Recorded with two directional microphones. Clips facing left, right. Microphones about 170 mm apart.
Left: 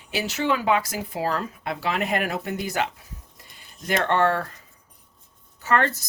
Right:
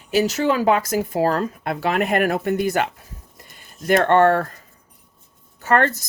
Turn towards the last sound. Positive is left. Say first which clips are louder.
# right 4 dB
turn(degrees=-50)  # may be behind; listen again after turning